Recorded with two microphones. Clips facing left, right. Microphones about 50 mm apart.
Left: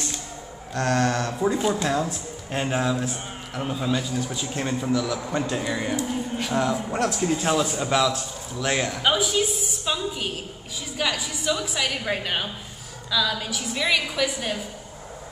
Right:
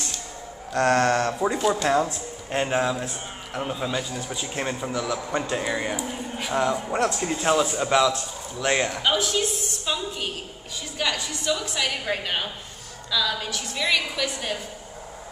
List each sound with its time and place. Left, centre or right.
0.7 s a sound: right
1.2 s speech: centre
2.0 s a man's voice: centre
9.0 s a woman's voice: centre